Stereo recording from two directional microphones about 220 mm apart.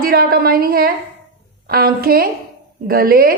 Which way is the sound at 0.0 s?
45° right (ahead or behind).